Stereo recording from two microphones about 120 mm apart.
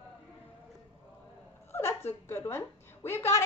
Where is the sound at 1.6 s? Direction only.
20° left (ahead or behind).